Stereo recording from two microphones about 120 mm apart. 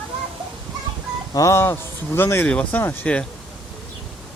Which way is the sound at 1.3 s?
25° left (ahead or behind).